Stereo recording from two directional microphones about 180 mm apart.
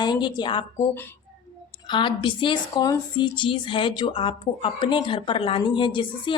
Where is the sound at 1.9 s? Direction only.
25° left (ahead or behind).